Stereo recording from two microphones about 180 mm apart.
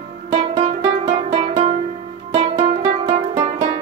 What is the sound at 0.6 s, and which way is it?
Music, 35° right (ahead or behind).